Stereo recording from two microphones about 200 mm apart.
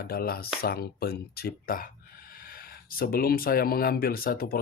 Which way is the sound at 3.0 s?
50° left (ahead or behind).